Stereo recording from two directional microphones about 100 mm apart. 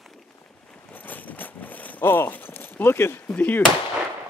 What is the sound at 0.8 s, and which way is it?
Speech, 15° left (ahead or behind).